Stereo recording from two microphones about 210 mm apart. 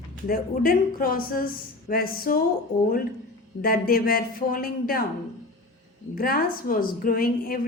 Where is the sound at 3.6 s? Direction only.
45° left (ahead or behind).